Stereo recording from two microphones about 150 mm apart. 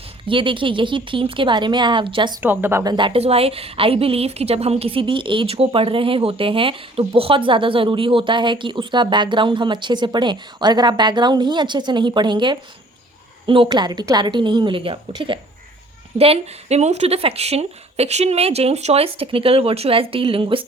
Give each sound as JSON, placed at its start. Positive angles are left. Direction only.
{"t": 0.3, "sound": "a woman's voice", "side_deg": -35}
{"t": 2.4, "sound": "speech", "side_deg": -15}
{"t": 2.8, "sound": "a woman's voice", "side_deg": -30}